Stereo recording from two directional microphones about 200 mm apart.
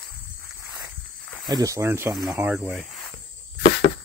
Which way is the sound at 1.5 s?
15° right (ahead or behind).